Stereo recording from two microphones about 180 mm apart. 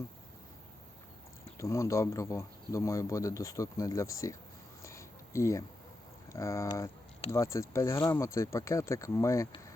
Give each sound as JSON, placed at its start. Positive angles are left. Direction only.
{"t": 1.5, "sound": "speech", "side_deg": 15}
{"t": 4.8, "sound": "a sound", "side_deg": 15}
{"t": 6.3, "sound": "speech", "side_deg": 15}